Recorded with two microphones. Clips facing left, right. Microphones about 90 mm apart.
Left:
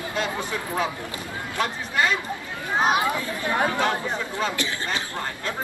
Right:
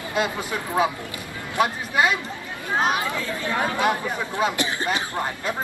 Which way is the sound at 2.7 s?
20° left (ahead or behind).